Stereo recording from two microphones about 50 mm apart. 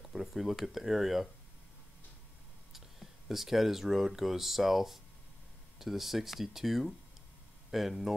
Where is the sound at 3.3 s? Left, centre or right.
Centre.